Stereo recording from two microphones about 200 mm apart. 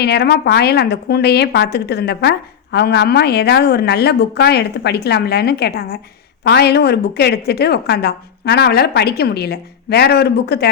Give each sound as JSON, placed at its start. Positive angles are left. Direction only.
{"t": 0.0, "sound": "a woman's voice", "side_deg": 55}